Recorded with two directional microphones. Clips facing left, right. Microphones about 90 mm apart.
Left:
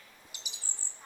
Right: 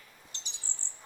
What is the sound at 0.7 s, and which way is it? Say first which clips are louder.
Bird: right 1 dB; 80° right.